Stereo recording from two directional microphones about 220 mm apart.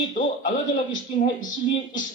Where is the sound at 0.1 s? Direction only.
35° left (ahead or behind).